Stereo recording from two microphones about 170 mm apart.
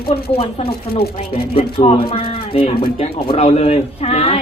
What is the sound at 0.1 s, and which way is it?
Speech, 35° left (ahead or behind).